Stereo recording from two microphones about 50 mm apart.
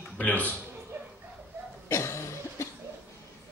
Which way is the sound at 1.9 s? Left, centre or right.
Left.